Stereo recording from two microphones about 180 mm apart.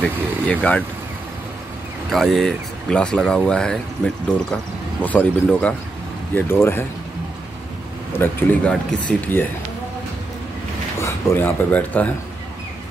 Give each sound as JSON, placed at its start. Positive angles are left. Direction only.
{"t": 0.0, "sound": "speech", "side_deg": 5}
{"t": 2.0, "sound": "speech", "side_deg": 0}
{"t": 8.2, "sound": "speech", "side_deg": 10}
{"t": 11.0, "sound": "speech", "side_deg": 15}